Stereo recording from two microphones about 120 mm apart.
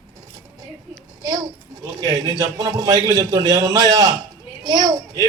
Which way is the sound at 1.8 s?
30° right (ahead or behind).